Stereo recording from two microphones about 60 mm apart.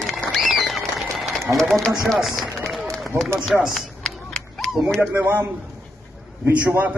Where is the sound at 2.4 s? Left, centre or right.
Centre.